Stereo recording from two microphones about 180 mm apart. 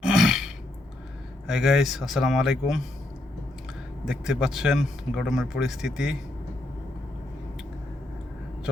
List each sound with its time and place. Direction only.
0.1 s throat clearing: 5° right (ahead or behind)
1.5 s a man's voice: centre (ahead or behind)
4.0 s a man's voice: 5° right (ahead or behind)